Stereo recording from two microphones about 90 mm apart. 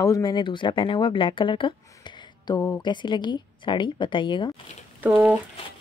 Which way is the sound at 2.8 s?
60° left (ahead or behind).